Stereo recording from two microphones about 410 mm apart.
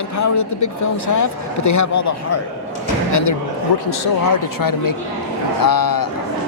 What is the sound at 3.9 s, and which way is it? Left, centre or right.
A man's voice, left.